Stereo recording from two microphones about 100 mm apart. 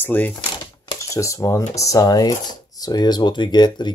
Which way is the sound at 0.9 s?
30° left (ahead or behind).